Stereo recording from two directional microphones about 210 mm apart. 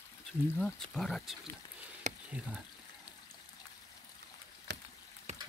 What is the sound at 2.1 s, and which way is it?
Frying, 35° right (ahead or behind).